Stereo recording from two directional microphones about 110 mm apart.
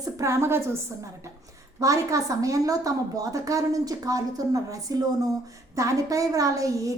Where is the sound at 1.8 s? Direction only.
30° right (ahead or behind).